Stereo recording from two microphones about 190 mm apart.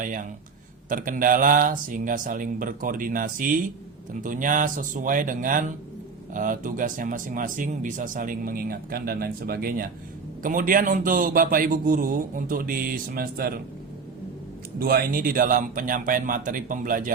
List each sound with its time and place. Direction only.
0.9 s speech: 45° right (ahead or behind)
14.8 s speech: 50° right (ahead or behind)